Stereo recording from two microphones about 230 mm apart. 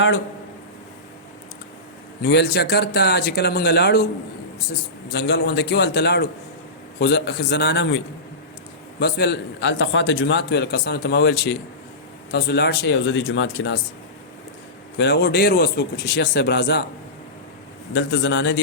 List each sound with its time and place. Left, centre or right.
2.2 s a man's voice: left
5.1 s a man's voice: left
14.9 s a man's voice: left
17.9 s a man's voice: left